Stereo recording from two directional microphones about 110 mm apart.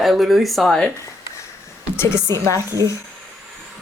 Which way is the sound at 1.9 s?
20° left (ahead or behind).